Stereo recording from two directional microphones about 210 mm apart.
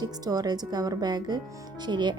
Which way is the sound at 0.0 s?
20° right (ahead or behind).